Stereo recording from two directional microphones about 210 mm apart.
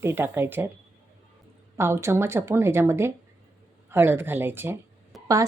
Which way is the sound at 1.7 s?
10° right (ahead or behind).